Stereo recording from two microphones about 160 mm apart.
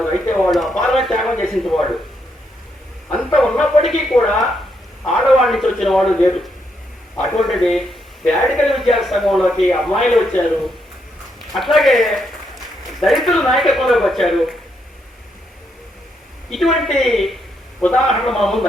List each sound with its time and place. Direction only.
0.0 s speech: 5° left (ahead or behind)
3.2 s speech: 5° left (ahead or behind)
7.4 s speech: centre (ahead or behind)
11.5 s a man's voice: centre (ahead or behind)
16.5 s speech: centre (ahead or behind)